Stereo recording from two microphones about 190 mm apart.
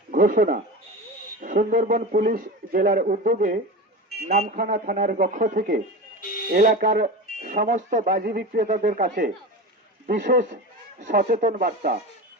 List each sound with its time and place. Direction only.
0.1 s speech: 45° right (ahead or behind)